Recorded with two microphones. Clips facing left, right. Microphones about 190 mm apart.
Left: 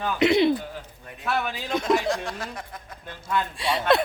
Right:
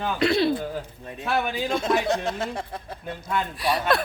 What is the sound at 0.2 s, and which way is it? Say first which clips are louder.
Speech: left 3 dB; 20° left (ahead or behind).